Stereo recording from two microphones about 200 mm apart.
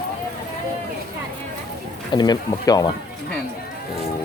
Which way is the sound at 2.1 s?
20° left (ahead or behind).